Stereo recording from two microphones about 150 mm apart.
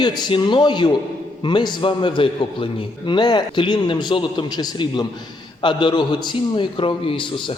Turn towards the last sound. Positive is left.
turn(degrees=35)  # may be behind; listen again after turning